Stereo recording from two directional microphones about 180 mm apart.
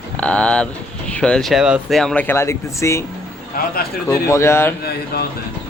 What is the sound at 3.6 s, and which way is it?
Speech, 55° left (ahead or behind).